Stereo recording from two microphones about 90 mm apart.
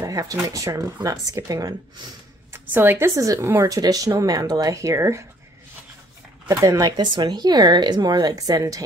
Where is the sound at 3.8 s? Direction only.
45° right (ahead or behind).